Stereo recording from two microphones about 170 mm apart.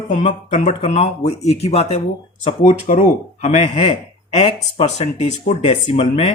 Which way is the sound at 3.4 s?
40° left (ahead or behind).